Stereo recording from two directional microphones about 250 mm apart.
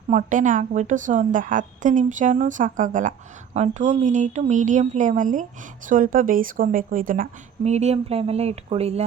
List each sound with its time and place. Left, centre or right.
0.1 s a woman's voice: right